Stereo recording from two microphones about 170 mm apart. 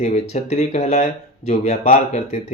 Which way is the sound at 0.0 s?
40° left (ahead or behind).